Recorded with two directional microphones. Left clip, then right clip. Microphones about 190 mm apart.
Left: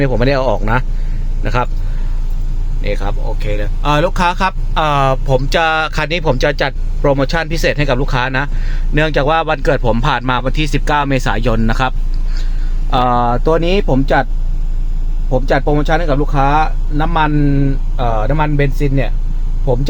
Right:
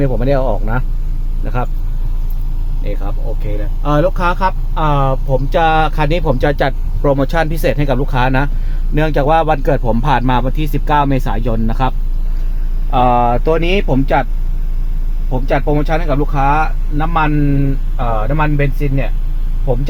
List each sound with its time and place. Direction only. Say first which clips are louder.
0.0 s speech: left 2 dB; 5° left (ahead or behind)
3.1 s speech: left 4 dB; 5° left (ahead or behind)
15.3 s speech: left 2 dB; 20° left (ahead or behind)